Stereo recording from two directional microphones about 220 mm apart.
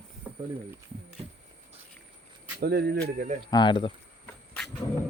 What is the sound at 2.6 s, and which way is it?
Speech, 45° right (ahead or behind).